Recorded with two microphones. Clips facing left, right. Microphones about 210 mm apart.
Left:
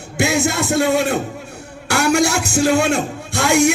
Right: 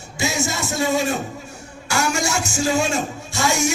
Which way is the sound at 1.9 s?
60° left (ahead or behind).